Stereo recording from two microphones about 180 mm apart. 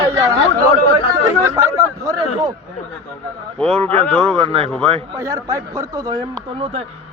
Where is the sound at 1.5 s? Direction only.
15° right (ahead or behind).